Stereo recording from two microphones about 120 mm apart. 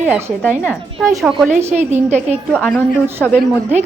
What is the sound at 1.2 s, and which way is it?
Speech, centre (ahead or behind).